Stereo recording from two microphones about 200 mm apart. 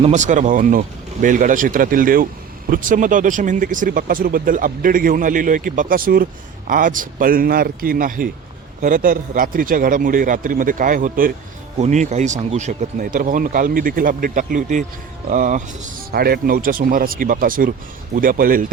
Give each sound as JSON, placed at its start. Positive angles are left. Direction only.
{"t": 0.0, "sound": "speech", "side_deg": -35}